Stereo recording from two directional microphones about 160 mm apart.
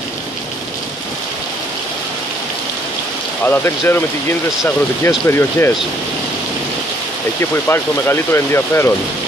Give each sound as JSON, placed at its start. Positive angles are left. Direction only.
{"t": 3.4, "sound": "speech", "side_deg": 15}
{"t": 7.5, "sound": "speech", "side_deg": 15}